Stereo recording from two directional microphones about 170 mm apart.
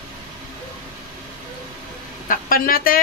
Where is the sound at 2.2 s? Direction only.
55° left (ahead or behind).